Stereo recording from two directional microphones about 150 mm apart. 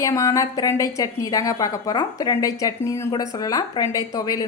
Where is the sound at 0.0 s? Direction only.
20° left (ahead or behind).